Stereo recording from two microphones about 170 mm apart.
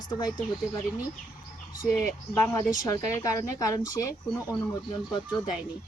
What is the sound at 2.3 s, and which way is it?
A woman's voice, 15° left (ahead or behind).